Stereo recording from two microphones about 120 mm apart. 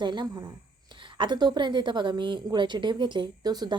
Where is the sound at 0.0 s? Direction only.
40° right (ahead or behind).